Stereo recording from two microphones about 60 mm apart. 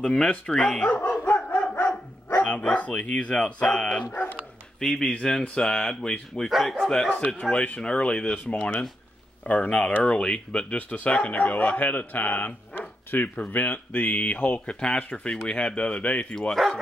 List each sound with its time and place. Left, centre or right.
0.0 s speech: centre
0.7 s dog: left
4.7 s speech: centre
5.0 s speech: centre
6.5 s speech: centre
7.2 s speech: centre
16.3 s speech: centre